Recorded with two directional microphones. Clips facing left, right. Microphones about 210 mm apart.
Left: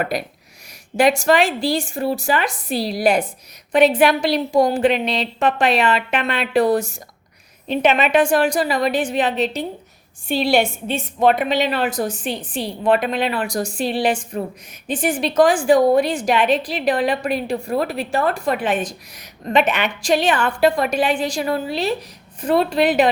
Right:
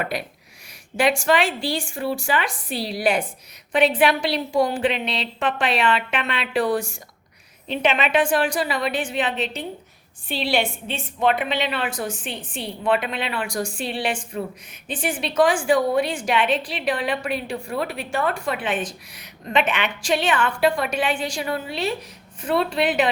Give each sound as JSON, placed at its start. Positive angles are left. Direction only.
{"t": 0.0, "sound": "a woman's voice", "side_deg": 40}